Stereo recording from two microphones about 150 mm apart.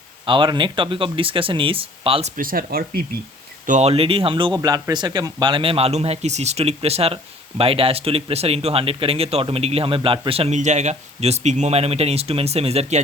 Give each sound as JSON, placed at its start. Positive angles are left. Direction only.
{"t": 0.3, "sound": "speech", "side_deg": -35}
{"t": 2.3, "sound": "speech", "side_deg": -70}
{"t": 3.7, "sound": "speech", "side_deg": -45}